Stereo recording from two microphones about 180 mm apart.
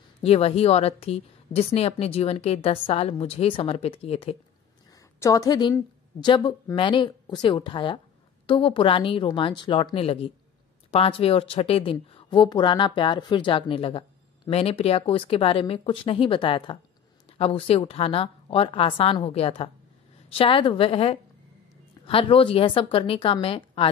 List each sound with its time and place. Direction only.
0.2 s speech: 35° left (ahead or behind)
4.9 s a woman's voice: 20° left (ahead or behind)